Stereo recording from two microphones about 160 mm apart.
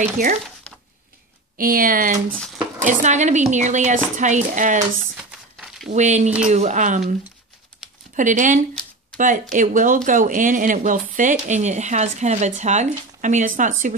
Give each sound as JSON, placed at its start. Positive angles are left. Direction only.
{"t": 1.6, "sound": "speech", "side_deg": -60}
{"t": 5.1, "sound": "a sound", "side_deg": -5}
{"t": 5.9, "sound": "speech", "side_deg": -45}
{"t": 8.2, "sound": "speech", "side_deg": -50}